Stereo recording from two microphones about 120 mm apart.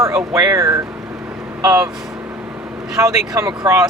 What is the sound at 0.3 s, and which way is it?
Speech, 25° right (ahead or behind).